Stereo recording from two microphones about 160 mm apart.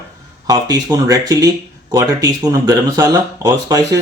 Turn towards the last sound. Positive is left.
turn(degrees=-20)  # may be behind; listen again after turning